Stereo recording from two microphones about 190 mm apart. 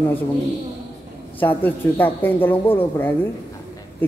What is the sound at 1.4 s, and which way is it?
Speech, 10° left (ahead or behind).